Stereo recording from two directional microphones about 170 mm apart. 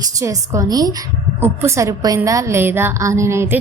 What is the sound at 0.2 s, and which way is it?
A woman's voice, 20° right (ahead or behind).